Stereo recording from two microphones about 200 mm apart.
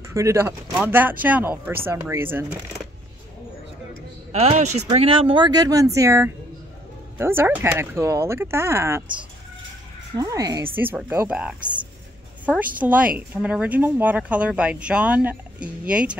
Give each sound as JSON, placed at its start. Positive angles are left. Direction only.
{"t": 0.1, "sound": "speech", "side_deg": -15}
{"t": 4.3, "sound": "speech", "side_deg": -35}
{"t": 10.1, "sound": "speech", "side_deg": -15}